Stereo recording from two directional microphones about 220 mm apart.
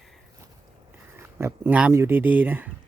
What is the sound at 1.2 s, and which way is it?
Speech, 10° right (ahead or behind).